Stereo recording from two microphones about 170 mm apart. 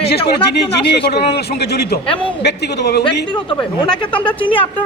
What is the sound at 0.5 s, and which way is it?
A man's voice, 80° left.